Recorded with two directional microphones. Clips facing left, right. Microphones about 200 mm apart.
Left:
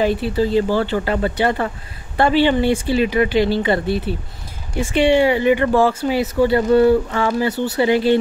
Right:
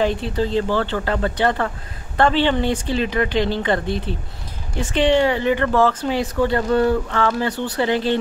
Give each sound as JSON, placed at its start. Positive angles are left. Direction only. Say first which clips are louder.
{"t": 0.0, "sound": "speech", "louder": "left 3 dB", "side_deg": 5}